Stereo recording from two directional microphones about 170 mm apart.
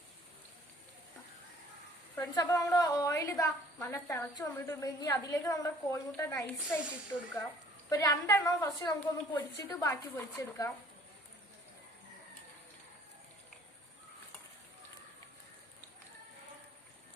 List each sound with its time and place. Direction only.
2.1 s a woman's voice: 20° left (ahead or behind)
7.9 s a woman's voice: 20° left (ahead or behind)